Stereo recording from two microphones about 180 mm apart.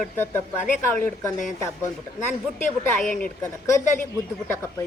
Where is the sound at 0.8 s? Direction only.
15° left (ahead or behind).